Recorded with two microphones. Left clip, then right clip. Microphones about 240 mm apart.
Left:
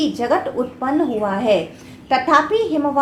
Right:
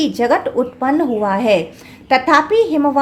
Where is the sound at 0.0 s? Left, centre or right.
Right.